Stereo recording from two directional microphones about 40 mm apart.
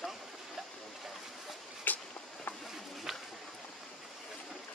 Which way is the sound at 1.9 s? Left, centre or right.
Left.